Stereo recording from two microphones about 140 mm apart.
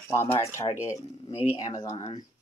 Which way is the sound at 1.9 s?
50° left (ahead or behind).